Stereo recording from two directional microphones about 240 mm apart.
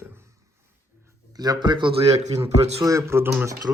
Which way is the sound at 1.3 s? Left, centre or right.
Centre.